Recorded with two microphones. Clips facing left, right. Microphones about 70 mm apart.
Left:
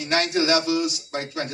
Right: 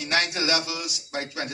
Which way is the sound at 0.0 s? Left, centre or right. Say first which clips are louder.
Left 4 dB; left.